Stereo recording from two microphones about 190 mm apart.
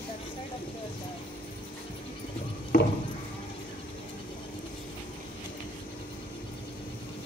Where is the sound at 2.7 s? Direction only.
45° left (ahead or behind).